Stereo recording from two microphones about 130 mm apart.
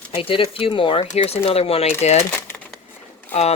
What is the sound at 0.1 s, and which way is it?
Speech, 45° left (ahead or behind).